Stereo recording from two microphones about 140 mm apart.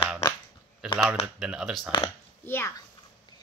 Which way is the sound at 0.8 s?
5° right (ahead or behind).